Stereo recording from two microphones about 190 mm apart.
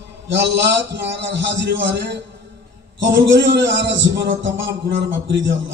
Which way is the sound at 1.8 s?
70° right (ahead or behind).